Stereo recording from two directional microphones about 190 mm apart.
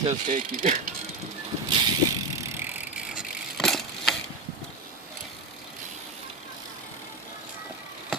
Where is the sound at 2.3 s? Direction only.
10° right (ahead or behind).